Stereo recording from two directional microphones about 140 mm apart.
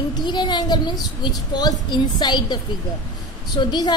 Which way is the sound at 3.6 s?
30° left (ahead or behind).